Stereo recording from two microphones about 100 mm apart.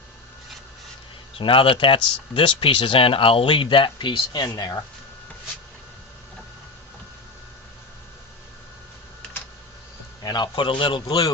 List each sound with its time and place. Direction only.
1.4 s speech: 60° left (ahead or behind); by 4.8 s 40° left (ahead or behind)
10.2 s speech: 45° left (ahead or behind)
11.0 s speech: 40° left (ahead or behind)